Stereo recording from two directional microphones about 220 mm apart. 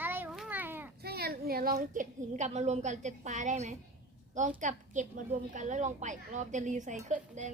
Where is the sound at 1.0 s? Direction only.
45° right (ahead or behind).